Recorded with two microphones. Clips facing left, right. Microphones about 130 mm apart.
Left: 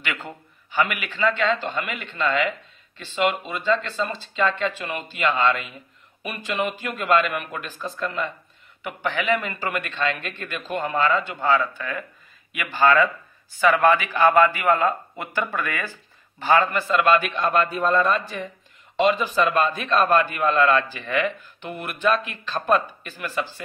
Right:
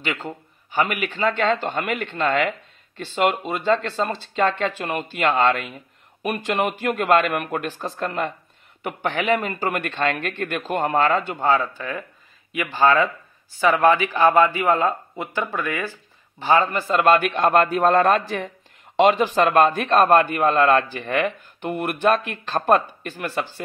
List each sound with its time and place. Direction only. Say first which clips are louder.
0.0 s speech: right 4 dB; 30° right (ahead or behind)
0.7 s a man's voice: right 2 dB; 45° right (ahead or behind); by 4.3 s 65° right (ahead or behind)
4.4 s a man's voice: right 2 dB; 50° right (ahead or behind)
9.8 s a man's voice: right 3 dB; 60° right (ahead or behind)
11.3 s a man's voice: right 1 dB; 40° right (ahead or behind)
16.7 s a man's voice: right 2 dB; 40° right (ahead or behind)